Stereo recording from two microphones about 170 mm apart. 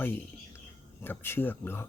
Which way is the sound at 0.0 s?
10° left (ahead or behind).